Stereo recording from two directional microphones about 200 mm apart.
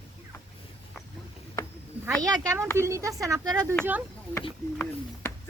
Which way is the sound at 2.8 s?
15° right (ahead or behind).